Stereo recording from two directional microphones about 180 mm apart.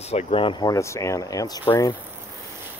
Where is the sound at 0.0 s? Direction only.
35° left (ahead or behind); by 2.0 s 20° left (ahead or behind).